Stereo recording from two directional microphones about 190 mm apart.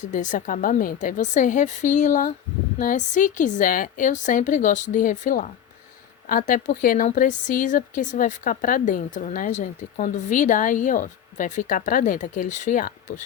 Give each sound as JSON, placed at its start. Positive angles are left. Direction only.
{"t": 0.0, "sound": "a woman's voice", "side_deg": 40}